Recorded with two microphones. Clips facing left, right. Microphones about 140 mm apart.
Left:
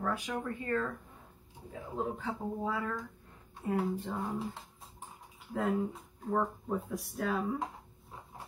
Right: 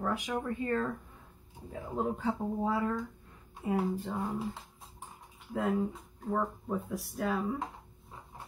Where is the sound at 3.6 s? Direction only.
10° right (ahead or behind).